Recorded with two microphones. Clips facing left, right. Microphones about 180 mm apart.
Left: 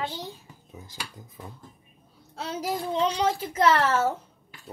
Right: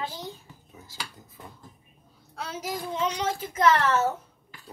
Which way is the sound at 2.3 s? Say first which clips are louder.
Left 3 dB; 35° left (ahead or behind).